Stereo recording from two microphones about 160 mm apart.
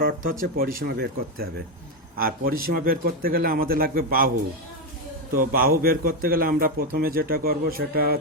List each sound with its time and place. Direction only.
0.0 s a man's voice: 60° right (ahead or behind); by 1.6 s 85° right
2.1 s a man's voice: 65° right (ahead or behind)
5.3 s a man's voice: 65° right (ahead or behind)